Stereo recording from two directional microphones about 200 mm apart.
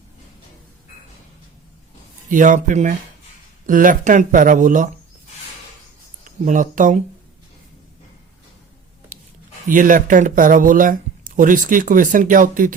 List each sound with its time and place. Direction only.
2.3 s speech: 40° right (ahead or behind)
6.4 s speech: 40° right (ahead or behind)
9.6 s speech: 40° right (ahead or behind)